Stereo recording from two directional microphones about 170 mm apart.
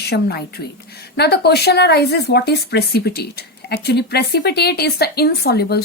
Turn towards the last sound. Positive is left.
turn(degrees=70)  # may be behind; listen again after turning